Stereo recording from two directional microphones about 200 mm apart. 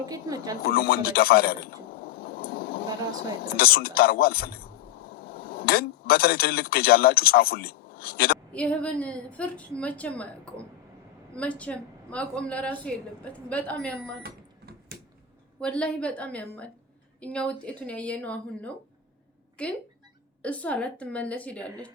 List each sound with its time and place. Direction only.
0.0 s speech: 20° right (ahead or behind)
0.6 s a sound: 50° left (ahead or behind)
3.4 s a man's voice: 50° left (ahead or behind)
8.5 s a woman's voice: 5° left (ahead or behind)
14.2 s cash register: 50° right (ahead or behind)
15.6 s a woman's voice: 5° left (ahead or behind)